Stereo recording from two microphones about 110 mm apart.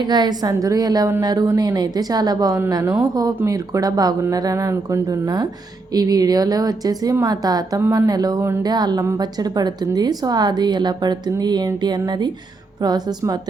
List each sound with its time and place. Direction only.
0.0 s a woman's voice: 40° right (ahead or behind)